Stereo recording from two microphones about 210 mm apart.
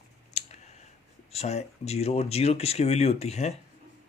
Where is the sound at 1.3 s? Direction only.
30° left (ahead or behind).